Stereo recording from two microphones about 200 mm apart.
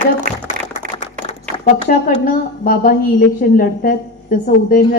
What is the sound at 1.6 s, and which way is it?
A woman's voice, 40° left (ahead or behind).